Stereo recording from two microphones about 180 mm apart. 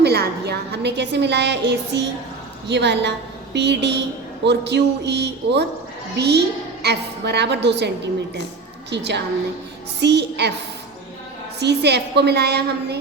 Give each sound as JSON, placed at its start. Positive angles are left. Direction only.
{"t": 0.0, "sound": "a woman's voice", "side_deg": -65}
{"t": 11.6, "sound": "a woman's voice", "side_deg": -70}